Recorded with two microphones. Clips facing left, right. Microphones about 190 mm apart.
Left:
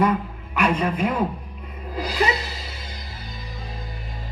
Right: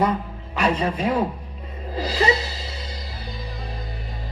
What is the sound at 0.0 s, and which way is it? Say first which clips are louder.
Music: left 1 dB; 30° right (ahead or behind).